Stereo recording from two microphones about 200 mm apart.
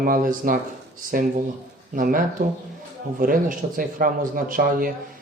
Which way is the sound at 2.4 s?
40° right (ahead or behind).